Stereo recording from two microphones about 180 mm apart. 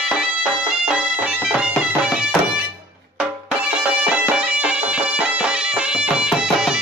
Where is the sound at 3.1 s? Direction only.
10° right (ahead or behind).